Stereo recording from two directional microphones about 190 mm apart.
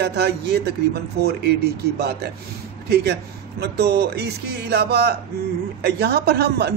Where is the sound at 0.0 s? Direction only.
60° right (ahead or behind).